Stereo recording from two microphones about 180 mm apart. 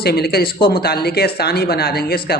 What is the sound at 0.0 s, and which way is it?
Speech, 60° left (ahead or behind).